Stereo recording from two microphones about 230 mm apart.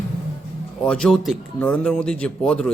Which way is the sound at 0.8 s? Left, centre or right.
Centre.